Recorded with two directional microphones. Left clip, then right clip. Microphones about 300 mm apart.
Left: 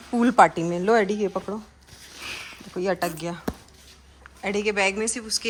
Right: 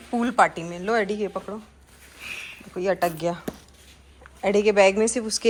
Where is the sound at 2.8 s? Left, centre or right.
Centre.